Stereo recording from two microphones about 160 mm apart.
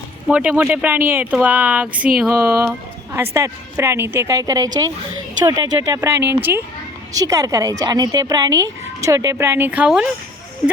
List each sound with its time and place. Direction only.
0.3 s a woman's voice: 10° right (ahead or behind)